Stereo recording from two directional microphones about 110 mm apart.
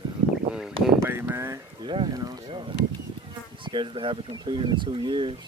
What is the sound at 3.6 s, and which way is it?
Speech, 45° right (ahead or behind).